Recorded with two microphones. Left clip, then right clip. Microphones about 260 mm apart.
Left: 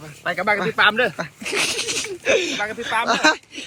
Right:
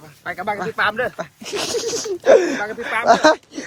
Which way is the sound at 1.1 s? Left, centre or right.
Centre.